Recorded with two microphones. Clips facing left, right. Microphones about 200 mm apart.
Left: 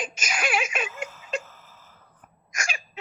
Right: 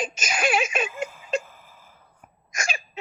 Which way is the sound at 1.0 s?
15° right (ahead or behind).